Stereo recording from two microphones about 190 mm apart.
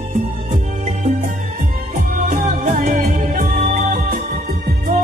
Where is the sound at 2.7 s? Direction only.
45° right (ahead or behind).